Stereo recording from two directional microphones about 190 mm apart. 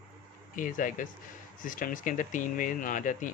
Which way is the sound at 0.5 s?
45° left (ahead or behind).